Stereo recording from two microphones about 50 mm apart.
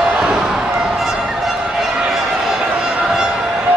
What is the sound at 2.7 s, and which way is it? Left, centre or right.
Music, centre.